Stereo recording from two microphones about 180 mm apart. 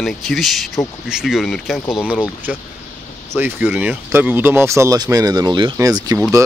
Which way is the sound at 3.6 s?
5° right (ahead or behind).